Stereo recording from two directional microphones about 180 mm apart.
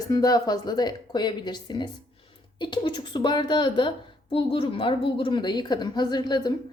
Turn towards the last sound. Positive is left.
turn(degrees=25)  # may be behind; listen again after turning